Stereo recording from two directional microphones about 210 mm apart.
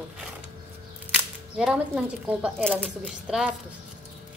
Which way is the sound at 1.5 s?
5° right (ahead or behind).